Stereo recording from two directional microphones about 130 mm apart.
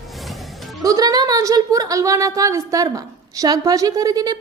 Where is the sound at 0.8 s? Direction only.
30° right (ahead or behind).